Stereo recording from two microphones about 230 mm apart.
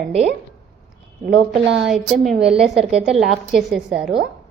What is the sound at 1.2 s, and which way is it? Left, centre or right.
Speech, right.